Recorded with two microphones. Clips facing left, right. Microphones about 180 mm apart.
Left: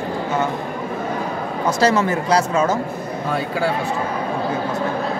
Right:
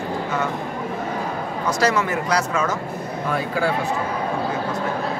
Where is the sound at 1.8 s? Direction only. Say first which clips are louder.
Left 4 dB; 30° left (ahead or behind).